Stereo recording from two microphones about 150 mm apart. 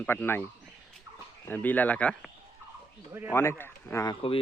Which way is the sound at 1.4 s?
10° left (ahead or behind).